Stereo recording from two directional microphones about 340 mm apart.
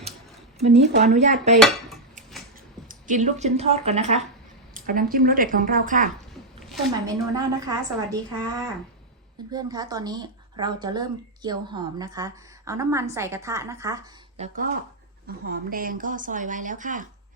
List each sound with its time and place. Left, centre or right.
0.6 s speech: centre
2.9 s speech: right
7.0 s speech: centre